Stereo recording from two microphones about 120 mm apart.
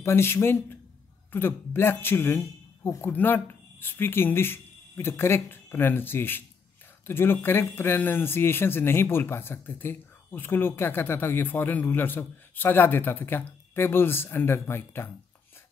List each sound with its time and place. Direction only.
0.0 s a man's voice: 20° left (ahead or behind)